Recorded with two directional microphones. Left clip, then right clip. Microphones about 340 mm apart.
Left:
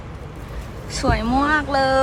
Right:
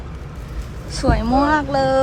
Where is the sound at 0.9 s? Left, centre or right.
Centre.